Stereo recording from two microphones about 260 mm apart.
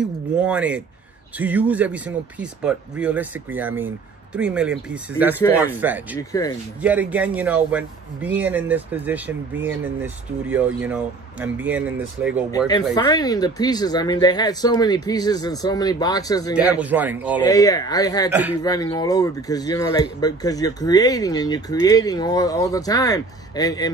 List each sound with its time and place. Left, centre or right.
0.0 s a man's voice: centre
12.4 s speech: centre
16.5 s a man's voice: centre
17.5 s speech: centre
18.3 s speech: centre
18.6 s speech: centre